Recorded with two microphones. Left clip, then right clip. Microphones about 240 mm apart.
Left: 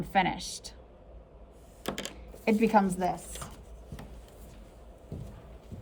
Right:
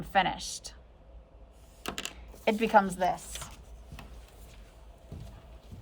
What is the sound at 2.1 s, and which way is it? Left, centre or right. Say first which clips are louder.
Zipper: even; centre.